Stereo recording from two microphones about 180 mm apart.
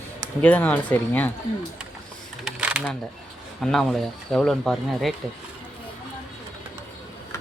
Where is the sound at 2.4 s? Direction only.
5° right (ahead or behind).